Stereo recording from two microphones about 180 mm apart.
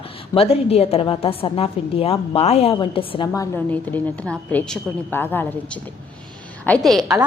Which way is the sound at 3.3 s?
15° left (ahead or behind).